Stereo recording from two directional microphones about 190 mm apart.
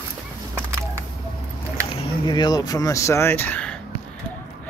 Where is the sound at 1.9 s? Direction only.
25° left (ahead or behind); by 3.8 s 5° left (ahead or behind).